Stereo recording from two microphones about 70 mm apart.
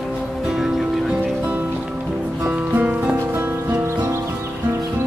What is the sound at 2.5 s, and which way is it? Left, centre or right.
Music, right.